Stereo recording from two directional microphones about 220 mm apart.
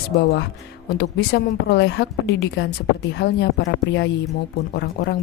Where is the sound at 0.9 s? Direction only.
45° left (ahead or behind).